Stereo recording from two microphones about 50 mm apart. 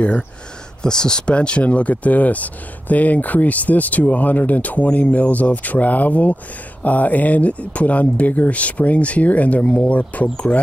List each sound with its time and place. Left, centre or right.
0.8 s speech: centre